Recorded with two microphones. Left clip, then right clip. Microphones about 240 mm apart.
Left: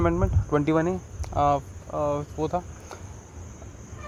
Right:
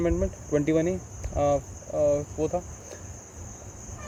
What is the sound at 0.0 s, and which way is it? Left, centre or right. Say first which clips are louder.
Speech: left 2 dB; centre.